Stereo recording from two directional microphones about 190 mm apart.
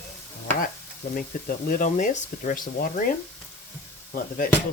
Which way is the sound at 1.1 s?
50° left (ahead or behind).